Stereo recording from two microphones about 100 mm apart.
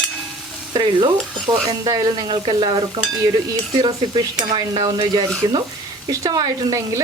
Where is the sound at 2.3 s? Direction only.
50° right (ahead or behind).